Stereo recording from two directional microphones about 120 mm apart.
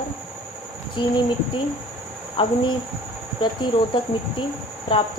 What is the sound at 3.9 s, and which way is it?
Speech, 45° left (ahead or behind).